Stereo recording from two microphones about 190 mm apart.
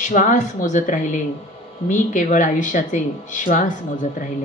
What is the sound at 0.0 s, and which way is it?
Speech, 45° left (ahead or behind).